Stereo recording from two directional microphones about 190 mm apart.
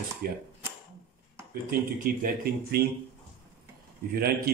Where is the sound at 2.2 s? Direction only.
55° right (ahead or behind).